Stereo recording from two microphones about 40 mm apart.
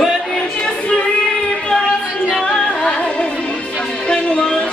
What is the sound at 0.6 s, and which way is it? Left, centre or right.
Music, left.